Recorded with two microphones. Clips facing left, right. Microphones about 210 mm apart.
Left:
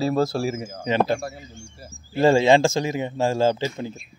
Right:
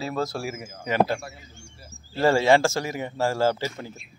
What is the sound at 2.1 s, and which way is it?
Speech, 15° left (ahead or behind).